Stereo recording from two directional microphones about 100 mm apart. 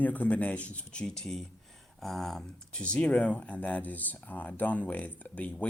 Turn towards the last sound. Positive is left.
turn(degrees=15)  # may be behind; listen again after turning